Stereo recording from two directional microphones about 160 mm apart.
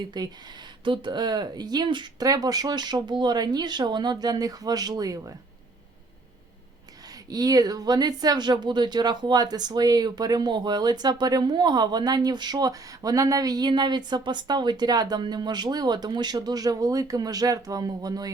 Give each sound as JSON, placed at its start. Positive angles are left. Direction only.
{"t": 0.0, "sound": "speech", "side_deg": -25}
{"t": 7.3, "sound": "speech", "side_deg": -25}